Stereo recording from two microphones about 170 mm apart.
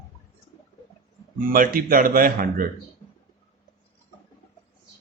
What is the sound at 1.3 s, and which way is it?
Speech, 55° right (ahead or behind).